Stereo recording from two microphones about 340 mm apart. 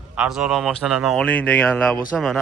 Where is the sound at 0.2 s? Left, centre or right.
Centre.